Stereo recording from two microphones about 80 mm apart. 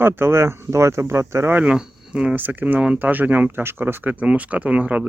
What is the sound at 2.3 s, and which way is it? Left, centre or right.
Speech, right.